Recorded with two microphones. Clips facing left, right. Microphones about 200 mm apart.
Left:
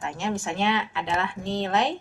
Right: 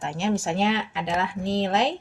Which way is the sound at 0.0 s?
35° right (ahead or behind).